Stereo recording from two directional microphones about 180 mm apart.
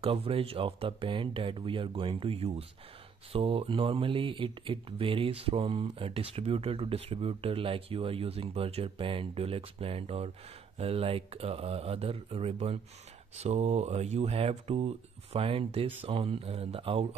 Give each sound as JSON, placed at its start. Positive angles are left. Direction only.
{"t": 0.0, "sound": "speech", "side_deg": -30}